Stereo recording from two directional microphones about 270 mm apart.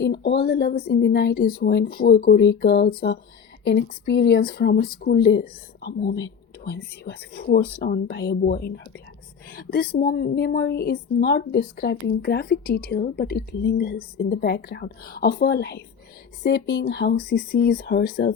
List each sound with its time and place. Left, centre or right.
0.0 s a woman's voice: left